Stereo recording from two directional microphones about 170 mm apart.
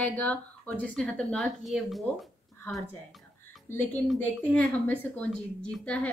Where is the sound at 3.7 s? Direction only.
15° left (ahead or behind).